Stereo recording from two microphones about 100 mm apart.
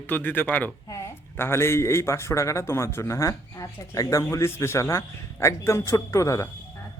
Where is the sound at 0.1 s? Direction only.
20° left (ahead or behind).